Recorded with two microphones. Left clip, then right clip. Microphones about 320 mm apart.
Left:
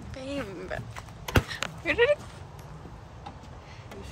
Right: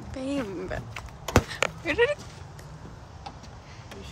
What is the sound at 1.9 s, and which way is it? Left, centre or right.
Speech, centre.